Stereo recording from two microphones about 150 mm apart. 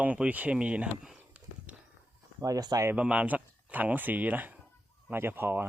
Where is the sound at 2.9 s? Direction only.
10° right (ahead or behind).